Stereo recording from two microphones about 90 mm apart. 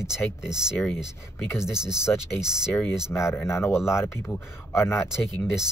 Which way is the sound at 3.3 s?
30° left (ahead or behind).